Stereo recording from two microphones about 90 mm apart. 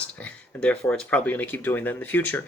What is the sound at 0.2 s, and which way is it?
Speech, 15° left (ahead or behind).